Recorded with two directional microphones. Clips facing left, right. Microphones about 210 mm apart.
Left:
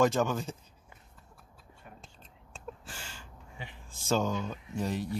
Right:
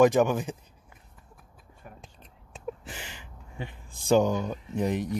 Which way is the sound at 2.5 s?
20° right (ahead or behind).